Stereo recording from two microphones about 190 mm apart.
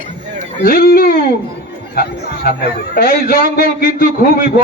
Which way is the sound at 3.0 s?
50° left (ahead or behind).